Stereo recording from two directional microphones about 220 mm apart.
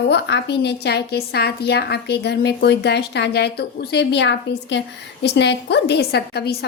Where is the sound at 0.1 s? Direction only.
50° left (ahead or behind).